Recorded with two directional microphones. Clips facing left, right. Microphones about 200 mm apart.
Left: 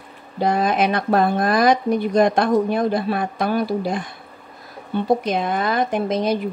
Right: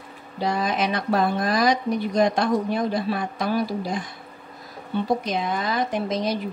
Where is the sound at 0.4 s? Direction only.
55° left (ahead or behind).